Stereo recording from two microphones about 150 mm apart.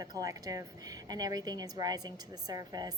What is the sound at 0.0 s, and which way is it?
A woman's voice, 25° right (ahead or behind).